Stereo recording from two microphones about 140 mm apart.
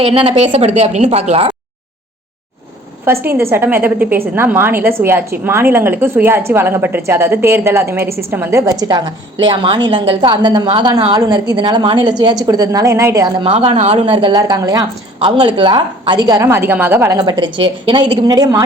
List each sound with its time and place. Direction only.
0.0 s a woman's voice: 40° right (ahead or behind)
3.0 s a woman's voice: 20° right (ahead or behind)
13.5 s a woman's voice: 40° right (ahead or behind); by 17.1 s 15° right (ahead or behind)
17.2 s a woman's voice: 30° right (ahead or behind)